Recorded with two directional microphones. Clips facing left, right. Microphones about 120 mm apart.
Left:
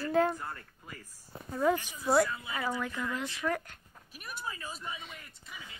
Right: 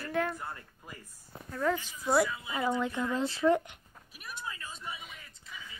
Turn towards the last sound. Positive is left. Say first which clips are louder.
# left 2 dB
turn(degrees=-5)  # may be behind; listen again after turning